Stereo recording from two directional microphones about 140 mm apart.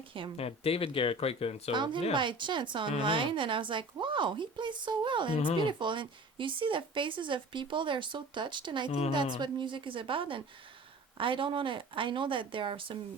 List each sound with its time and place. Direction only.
0.3 s speech: 45° left (ahead or behind)
1.7 s speech: 35° right (ahead or behind)
8.9 s speech: 45° left (ahead or behind)
9.1 s speech: 35° right (ahead or behind)